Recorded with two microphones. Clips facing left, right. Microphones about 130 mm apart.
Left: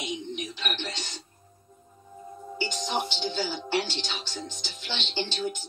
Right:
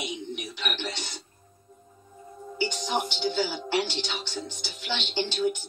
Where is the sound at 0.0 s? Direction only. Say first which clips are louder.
Left 1 dB; 15° right (ahead or behind).